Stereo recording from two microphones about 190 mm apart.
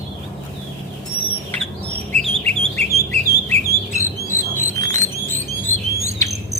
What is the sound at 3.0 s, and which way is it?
Bird, 15° left (ahead or behind).